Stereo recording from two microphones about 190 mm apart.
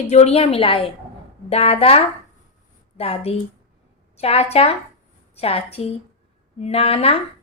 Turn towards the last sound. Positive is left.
turn(degrees=30)  # may be behind; listen again after turning